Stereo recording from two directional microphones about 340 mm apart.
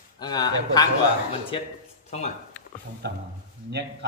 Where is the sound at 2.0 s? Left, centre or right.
Centre.